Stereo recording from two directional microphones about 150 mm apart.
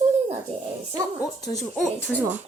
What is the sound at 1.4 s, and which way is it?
Speech, 25° left (ahead or behind).